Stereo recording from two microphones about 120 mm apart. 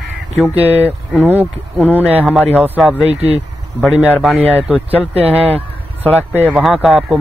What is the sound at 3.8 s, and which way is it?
Speech, centre (ahead or behind).